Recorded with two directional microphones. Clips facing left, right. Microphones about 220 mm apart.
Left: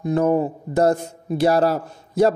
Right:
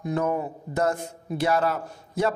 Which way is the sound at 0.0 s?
30° left (ahead or behind).